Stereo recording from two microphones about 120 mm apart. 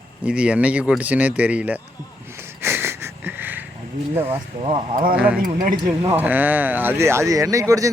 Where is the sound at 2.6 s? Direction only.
20° right (ahead or behind).